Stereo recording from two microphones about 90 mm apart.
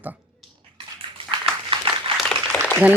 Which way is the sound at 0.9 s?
80° right.